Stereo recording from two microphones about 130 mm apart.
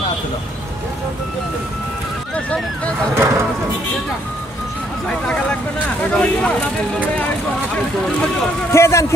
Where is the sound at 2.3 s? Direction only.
10° left (ahead or behind).